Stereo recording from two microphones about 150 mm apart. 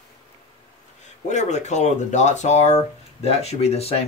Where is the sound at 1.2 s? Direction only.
50° left (ahead or behind).